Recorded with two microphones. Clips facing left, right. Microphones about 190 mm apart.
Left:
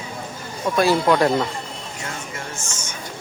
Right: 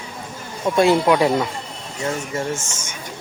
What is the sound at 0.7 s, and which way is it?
Speech, 20° right (ahead or behind).